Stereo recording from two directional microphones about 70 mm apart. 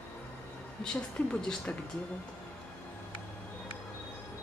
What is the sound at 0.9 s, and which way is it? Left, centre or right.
Speech, centre.